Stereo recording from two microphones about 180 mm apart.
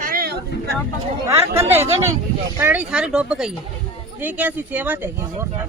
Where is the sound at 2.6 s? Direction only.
10° right (ahead or behind).